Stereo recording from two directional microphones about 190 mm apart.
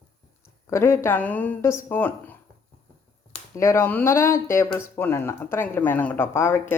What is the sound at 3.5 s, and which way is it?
Speech, 15° left (ahead or behind).